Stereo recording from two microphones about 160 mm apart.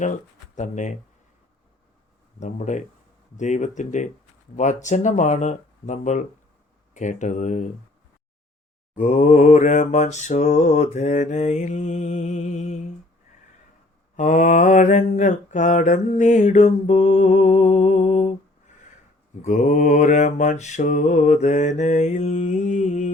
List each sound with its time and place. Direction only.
0.0 s speech: 50° left (ahead or behind)
2.4 s mantra: 50° left (ahead or behind)
9.0 s mantra: 50° left (ahead or behind)
14.2 s mantra: 50° left (ahead or behind)
19.4 s mantra: 50° left (ahead or behind)